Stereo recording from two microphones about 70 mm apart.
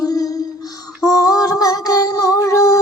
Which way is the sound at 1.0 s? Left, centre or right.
Left.